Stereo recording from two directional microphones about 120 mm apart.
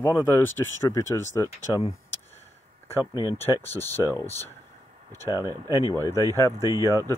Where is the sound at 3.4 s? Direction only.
20° left (ahead or behind).